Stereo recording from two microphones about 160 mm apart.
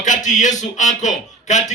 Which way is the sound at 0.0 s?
50° left (ahead or behind).